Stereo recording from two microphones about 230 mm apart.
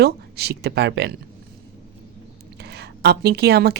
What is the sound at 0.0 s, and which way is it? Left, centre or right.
Speech, right.